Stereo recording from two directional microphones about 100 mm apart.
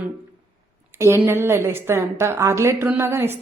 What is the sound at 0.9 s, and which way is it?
A woman's voice, 25° right (ahead or behind).